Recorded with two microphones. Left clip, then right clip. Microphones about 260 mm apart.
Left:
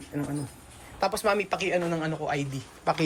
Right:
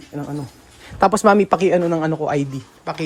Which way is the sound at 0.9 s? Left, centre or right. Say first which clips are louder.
Right 12 dB; right.